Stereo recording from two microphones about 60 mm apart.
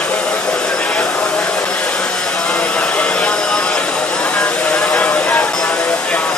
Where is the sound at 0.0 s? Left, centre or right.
Centre.